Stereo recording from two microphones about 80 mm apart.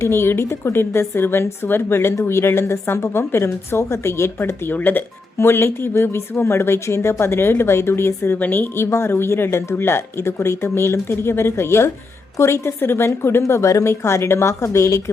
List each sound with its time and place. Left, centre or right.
0.0 s a woman's voice: left